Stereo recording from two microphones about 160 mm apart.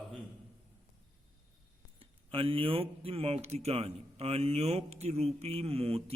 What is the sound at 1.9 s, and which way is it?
Speech, 35° right (ahead or behind).